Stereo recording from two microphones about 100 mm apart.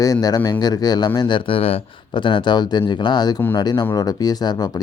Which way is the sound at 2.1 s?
55° left (ahead or behind).